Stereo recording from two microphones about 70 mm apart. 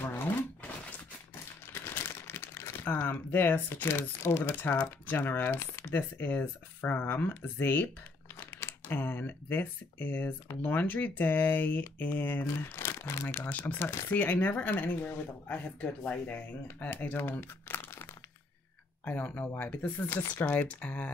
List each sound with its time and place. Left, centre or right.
0.0 s a sound: left
1.7 s speech: left
13.5 s speech: left
19.0 s speech: left